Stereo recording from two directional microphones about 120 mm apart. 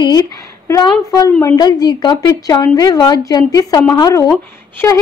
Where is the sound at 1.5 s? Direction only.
35° left (ahead or behind).